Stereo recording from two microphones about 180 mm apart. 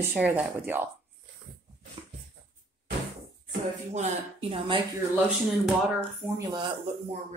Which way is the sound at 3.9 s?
30° right (ahead or behind).